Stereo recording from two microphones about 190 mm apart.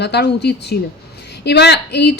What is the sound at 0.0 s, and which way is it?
A woman's voice, 60° left (ahead or behind).